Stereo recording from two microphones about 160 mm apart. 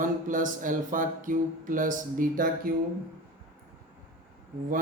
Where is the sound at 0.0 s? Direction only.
55° right (ahead or behind).